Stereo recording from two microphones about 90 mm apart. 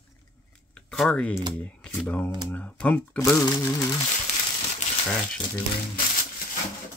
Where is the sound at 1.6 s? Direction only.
10° left (ahead or behind).